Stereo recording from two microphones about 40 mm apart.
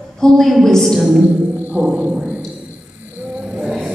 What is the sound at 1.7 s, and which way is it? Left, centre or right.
Speech, right.